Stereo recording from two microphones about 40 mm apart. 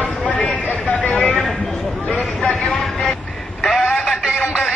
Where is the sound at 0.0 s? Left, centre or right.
Left.